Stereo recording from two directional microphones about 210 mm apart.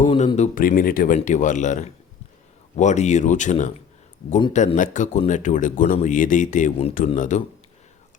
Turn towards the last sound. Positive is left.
turn(degrees=35)  # may be behind; listen again after turning